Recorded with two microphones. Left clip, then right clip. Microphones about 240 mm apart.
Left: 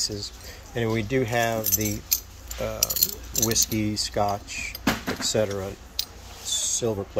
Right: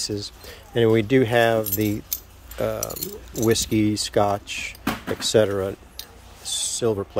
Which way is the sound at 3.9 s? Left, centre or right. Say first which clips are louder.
Right 4 dB; right.